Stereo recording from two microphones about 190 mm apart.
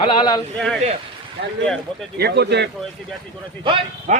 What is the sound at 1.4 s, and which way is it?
Speech, 60° right (ahead or behind).